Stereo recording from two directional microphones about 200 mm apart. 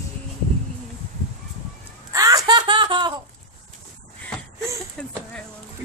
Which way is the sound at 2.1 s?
15° right (ahead or behind).